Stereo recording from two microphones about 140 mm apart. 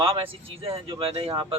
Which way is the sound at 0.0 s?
40° right (ahead or behind).